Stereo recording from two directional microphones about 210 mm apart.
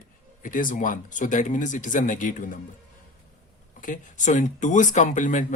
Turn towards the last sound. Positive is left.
turn(degrees=35)  # may be behind; listen again after turning